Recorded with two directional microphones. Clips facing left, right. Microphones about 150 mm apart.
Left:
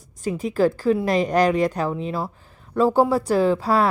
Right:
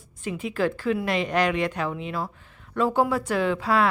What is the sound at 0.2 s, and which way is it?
Speech, 40° left (ahead or behind).